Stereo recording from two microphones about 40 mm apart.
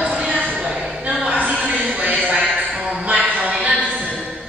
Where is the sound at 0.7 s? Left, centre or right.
Centre.